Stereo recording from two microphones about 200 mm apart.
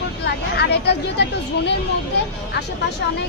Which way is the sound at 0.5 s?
55° left (ahead or behind).